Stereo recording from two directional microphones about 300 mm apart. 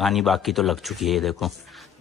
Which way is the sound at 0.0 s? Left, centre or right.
Centre.